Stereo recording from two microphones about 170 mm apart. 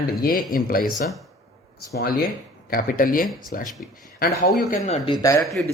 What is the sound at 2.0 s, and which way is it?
Speech, 60° left (ahead or behind).